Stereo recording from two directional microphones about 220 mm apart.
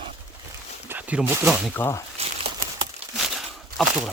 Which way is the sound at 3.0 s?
30° right (ahead or behind).